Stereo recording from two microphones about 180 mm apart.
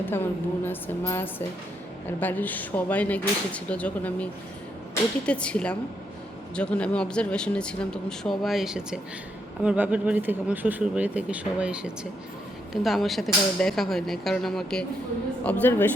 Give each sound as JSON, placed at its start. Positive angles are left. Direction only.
{"t": 0.0, "sound": "speech", "side_deg": 10}